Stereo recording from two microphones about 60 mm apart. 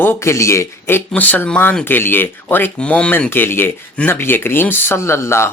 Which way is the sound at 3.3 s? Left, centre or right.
Left.